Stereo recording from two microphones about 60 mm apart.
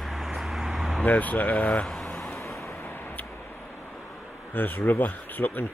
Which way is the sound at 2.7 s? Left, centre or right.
Left.